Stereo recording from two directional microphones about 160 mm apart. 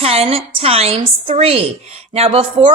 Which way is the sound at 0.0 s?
40° right (ahead or behind).